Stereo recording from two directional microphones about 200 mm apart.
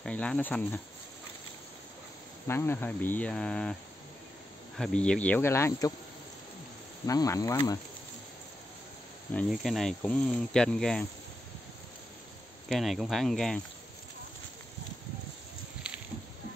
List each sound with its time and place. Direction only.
0.0 s speech: 5° left (ahead or behind)
2.4 s speech: 10° left (ahead or behind)
4.7 s speech: 5° left (ahead or behind)
7.1 s speech: 15° left (ahead or behind)
9.3 s speech: 5° left (ahead or behind)
12.6 s speech: centre (ahead or behind)